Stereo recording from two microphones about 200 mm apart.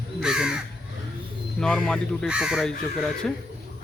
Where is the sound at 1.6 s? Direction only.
5° left (ahead or behind).